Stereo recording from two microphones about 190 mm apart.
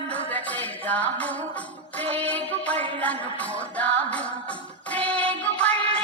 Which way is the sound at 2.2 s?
5° left (ahead or behind).